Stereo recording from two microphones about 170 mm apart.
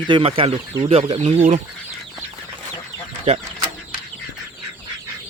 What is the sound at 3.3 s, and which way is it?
Speech, 40° right (ahead or behind).